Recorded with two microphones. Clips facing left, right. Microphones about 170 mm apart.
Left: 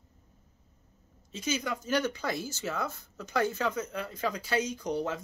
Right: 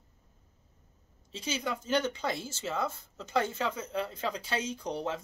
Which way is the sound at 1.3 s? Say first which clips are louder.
Left 2 dB; 30° right (ahead or behind).